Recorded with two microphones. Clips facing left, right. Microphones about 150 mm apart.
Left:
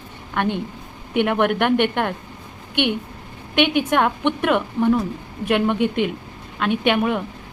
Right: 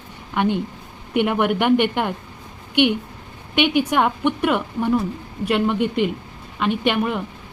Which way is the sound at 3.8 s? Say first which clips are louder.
Even; 5° right (ahead or behind).